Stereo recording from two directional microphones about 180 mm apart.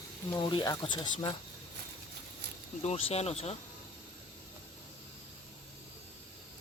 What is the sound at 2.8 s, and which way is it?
Speech, 35° left (ahead or behind).